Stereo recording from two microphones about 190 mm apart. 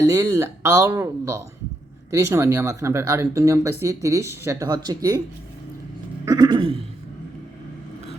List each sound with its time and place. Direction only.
0.0 s speech: 15° right (ahead or behind)
6.2 s throat clearing: 20° right (ahead or behind)